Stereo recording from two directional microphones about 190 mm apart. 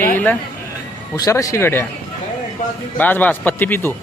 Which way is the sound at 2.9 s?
10° left (ahead or behind).